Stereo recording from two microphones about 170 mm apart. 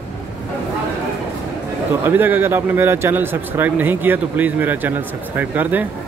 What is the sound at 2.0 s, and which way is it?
Speech, 10° right (ahead or behind).